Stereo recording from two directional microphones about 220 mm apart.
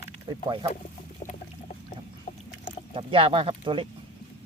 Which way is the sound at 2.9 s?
25° right (ahead or behind).